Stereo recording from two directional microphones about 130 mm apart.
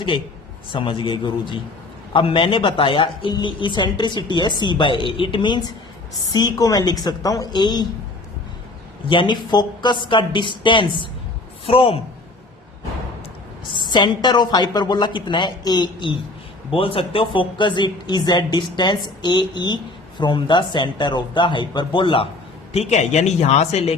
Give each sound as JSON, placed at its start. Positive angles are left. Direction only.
{"t": 0.7, "sound": "a woman's voice", "side_deg": 40}
{"t": 9.0, "sound": "a woman's voice", "side_deg": 35}
{"t": 13.7, "sound": "a woman's voice", "side_deg": 35}
{"t": 22.7, "sound": "speech", "side_deg": 55}